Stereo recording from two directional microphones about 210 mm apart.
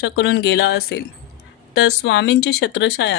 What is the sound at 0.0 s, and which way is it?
Speech, 55° left (ahead or behind).